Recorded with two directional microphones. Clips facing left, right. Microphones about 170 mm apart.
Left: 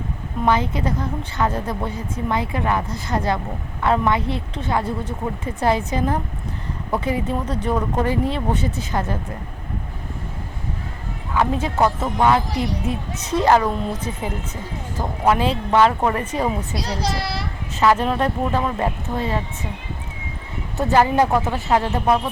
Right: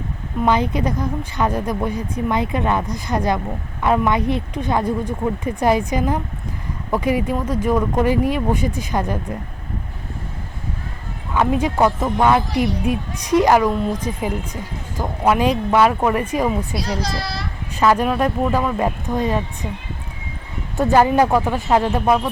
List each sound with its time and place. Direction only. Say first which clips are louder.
0.4 s speech: right 2 dB; 15° right (ahead or behind)
11.3 s speech: right 2 dB; 15° right (ahead or behind)
17.7 s speech: right 1 dB; 15° right (ahead or behind)
20.7 s speech: right 2 dB; 15° right (ahead or behind)